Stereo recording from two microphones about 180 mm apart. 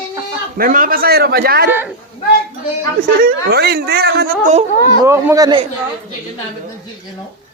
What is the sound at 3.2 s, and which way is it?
Speech, 60° right (ahead or behind).